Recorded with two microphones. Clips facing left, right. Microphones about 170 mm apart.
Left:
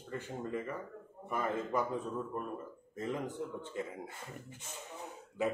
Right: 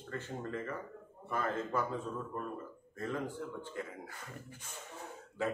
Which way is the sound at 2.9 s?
20° left (ahead or behind).